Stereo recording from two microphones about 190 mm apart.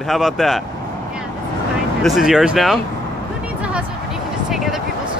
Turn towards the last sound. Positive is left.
turn(degrees=0)  # may be behind; listen again after turning